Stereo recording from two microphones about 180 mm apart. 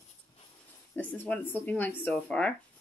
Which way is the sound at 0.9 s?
10° left (ahead or behind).